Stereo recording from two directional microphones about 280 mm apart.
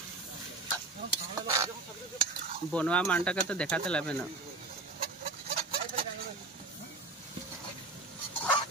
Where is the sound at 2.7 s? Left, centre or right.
Centre.